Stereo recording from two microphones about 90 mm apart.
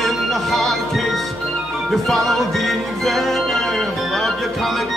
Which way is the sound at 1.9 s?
5° left (ahead or behind).